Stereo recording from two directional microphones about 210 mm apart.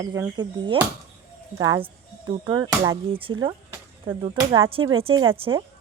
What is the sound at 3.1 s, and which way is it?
Speech, 25° right (ahead or behind).